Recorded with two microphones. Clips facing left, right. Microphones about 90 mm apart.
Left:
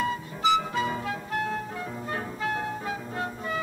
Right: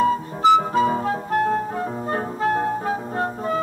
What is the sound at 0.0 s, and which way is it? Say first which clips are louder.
Music: right 9 dB; 40° right (ahead or behind).